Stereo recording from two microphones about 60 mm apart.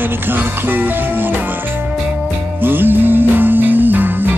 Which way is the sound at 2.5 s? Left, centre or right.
Right.